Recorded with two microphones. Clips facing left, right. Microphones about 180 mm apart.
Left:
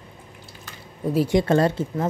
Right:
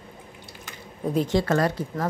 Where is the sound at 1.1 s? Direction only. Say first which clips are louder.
Left 3 dB; 10° left (ahead or behind).